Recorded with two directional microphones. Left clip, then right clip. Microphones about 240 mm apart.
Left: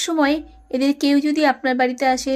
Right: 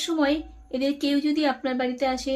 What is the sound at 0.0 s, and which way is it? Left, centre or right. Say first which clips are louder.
A woman's voice: left 5 dB; left.